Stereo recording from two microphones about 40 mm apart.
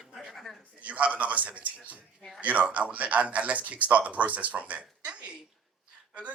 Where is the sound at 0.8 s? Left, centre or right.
Right.